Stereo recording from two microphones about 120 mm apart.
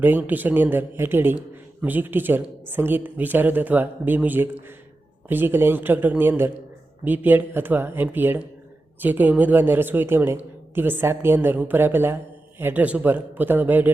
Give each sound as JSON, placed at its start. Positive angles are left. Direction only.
{"t": 0.0, "sound": "a woman's voice", "side_deg": -15}